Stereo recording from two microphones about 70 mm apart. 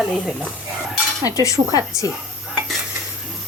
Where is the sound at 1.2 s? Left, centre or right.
Left.